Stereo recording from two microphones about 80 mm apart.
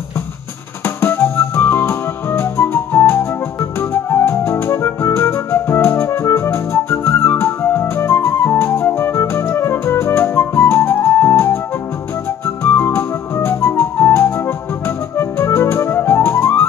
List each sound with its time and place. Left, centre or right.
0.8 s music: left